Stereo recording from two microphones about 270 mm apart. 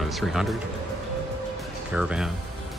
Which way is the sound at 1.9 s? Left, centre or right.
Centre.